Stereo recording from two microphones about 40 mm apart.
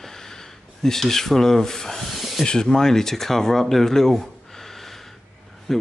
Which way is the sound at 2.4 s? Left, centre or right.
Centre.